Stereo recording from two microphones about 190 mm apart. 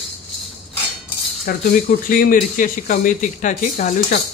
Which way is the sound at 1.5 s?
50° left (ahead or behind).